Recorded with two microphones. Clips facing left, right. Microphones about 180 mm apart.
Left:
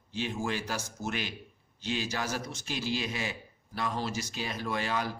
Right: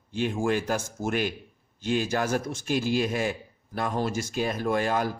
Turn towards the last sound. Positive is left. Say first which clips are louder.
# right 7 dB
turn(degrees=-50)  # may be behind; listen again after turning